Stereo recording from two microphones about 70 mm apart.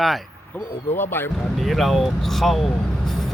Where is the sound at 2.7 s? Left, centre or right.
Centre.